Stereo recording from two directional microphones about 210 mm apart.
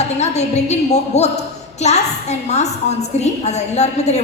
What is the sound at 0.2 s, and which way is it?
A woman's voice, 30° left (ahead or behind).